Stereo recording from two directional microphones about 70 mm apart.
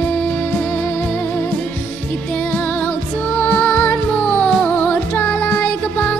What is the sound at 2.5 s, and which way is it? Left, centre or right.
Music, left.